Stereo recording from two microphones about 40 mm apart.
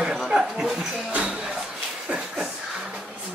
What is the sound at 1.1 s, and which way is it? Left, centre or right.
Speech, right.